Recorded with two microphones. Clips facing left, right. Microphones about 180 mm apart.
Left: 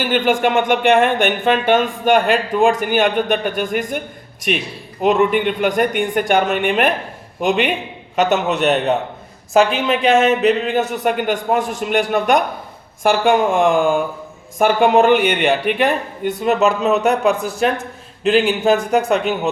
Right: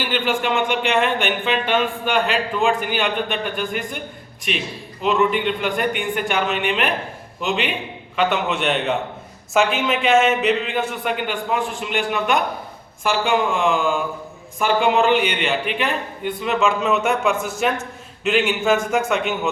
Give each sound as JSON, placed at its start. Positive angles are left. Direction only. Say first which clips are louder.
{"t": 0.0, "sound": "speech", "louder": "left 6 dB", "side_deg": 50}
{"t": 10.0, "sound": "speech", "louder": "left 3 dB", "side_deg": 40}